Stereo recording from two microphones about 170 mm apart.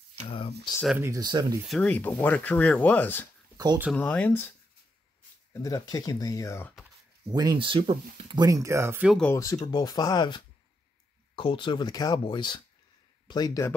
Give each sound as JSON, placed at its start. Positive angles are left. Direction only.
{"t": 0.3, "sound": "speech", "side_deg": 35}
{"t": 0.9, "sound": "speech", "side_deg": -15}
{"t": 1.7, "sound": "speech", "side_deg": 5}
{"t": 3.5, "sound": "a sound", "side_deg": -20}
{"t": 3.9, "sound": "speech", "side_deg": 5}
{"t": 7.3, "sound": "speech", "side_deg": -25}
{"t": 9.3, "sound": "speech", "side_deg": 20}